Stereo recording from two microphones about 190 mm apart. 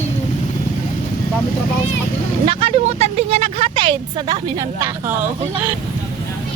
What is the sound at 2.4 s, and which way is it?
Speech, 30° right (ahead or behind).